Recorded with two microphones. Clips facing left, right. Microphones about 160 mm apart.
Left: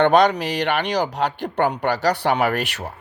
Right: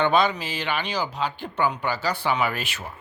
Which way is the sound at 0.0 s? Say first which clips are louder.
Left 6 dB; 70° left (ahead or behind).